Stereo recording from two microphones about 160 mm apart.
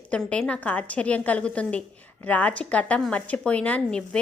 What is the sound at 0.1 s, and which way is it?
A woman's voice, 5° left (ahead or behind).